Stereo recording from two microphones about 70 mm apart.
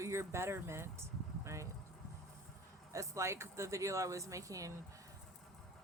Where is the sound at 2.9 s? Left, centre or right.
Right.